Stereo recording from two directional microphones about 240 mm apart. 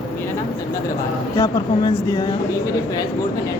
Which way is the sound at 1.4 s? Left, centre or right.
Centre.